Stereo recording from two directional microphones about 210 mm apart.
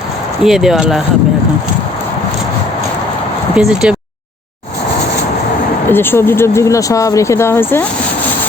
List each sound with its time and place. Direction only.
0.4 s speech: centre (ahead or behind)
3.5 s speech: 5° right (ahead or behind)
5.9 s speech: 10° left (ahead or behind)